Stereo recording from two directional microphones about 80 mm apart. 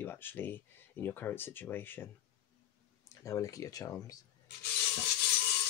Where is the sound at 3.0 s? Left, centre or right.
Left.